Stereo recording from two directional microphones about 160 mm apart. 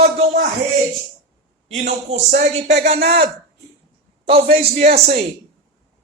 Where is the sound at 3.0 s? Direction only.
80° right.